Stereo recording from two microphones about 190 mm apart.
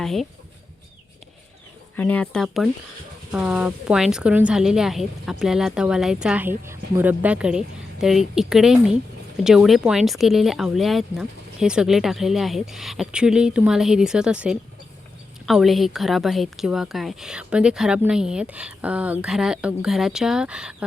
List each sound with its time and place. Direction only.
0.0 s a woman's voice: centre (ahead or behind)
2.0 s a woman's voice: 10° left (ahead or behind)